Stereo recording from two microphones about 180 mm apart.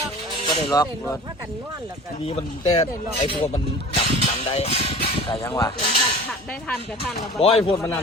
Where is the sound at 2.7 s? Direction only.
35° left (ahead or behind).